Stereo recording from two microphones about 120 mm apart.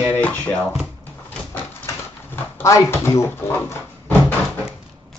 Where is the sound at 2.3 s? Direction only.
20° left (ahead or behind).